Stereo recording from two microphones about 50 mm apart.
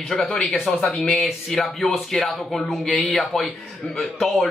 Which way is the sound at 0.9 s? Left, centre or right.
Centre.